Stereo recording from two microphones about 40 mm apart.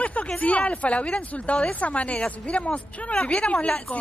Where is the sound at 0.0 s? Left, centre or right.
Left.